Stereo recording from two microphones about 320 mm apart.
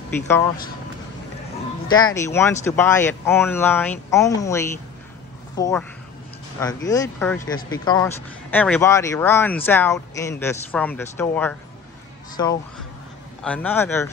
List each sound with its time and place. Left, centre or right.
0.1 s speech: centre
1.9 s speech: centre